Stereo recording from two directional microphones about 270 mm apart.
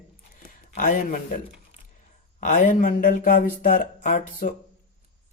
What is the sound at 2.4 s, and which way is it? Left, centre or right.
Speech, left.